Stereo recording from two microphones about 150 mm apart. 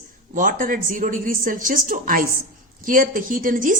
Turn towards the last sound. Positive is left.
turn(degrees=-60)  # may be behind; listen again after turning